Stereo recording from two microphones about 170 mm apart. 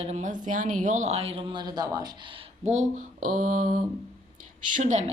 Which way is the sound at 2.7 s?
45° right (ahead or behind).